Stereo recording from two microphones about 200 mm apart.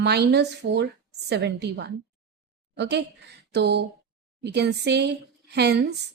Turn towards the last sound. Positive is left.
turn(degrees=-55)  # may be behind; listen again after turning